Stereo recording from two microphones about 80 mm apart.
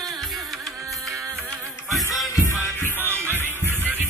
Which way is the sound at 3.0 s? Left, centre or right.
Right.